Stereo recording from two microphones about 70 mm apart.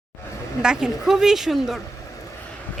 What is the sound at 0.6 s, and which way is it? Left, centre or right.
Speech, centre.